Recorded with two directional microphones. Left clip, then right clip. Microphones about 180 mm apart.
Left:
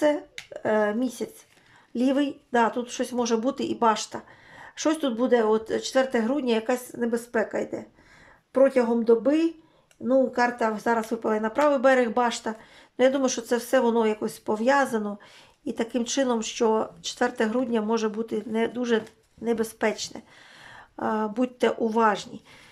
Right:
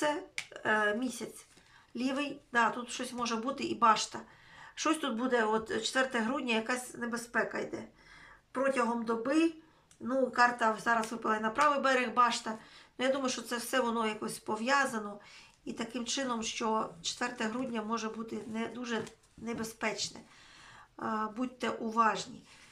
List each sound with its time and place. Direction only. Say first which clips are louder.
0.5 s speech: left 6 dB; 30° left (ahead or behind)